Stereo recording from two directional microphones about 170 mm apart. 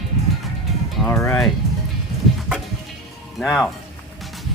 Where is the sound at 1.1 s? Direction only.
5° left (ahead or behind).